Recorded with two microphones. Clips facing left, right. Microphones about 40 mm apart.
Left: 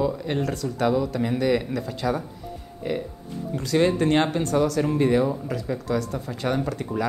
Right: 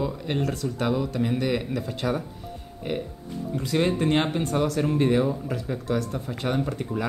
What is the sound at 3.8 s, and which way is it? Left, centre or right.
Speech, centre.